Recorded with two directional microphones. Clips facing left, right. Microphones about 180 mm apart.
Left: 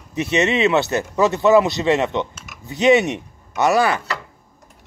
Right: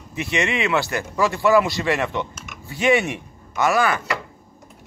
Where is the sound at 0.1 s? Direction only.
20° left (ahead or behind).